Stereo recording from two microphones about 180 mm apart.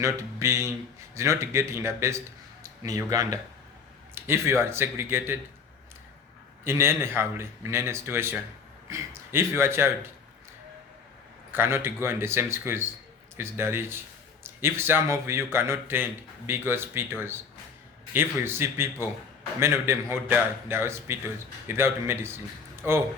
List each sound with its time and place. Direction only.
0.0 s a man's voice: 15° right (ahead or behind)
6.7 s a man's voice: 15° right (ahead or behind)
11.5 s a man's voice: 15° right (ahead or behind)
22.7 s a sound: 15° right (ahead or behind)